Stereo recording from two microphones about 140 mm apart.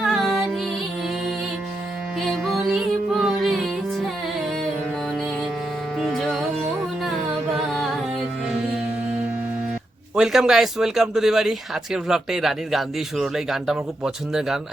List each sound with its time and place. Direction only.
0.0 s music: centre (ahead or behind)
2.2 s music: centre (ahead or behind)
6.0 s music: centre (ahead or behind)
10.2 s speech: 5° right (ahead or behind)